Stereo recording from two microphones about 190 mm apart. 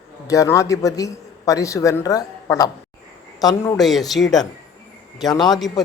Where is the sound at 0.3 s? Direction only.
15° left (ahead or behind).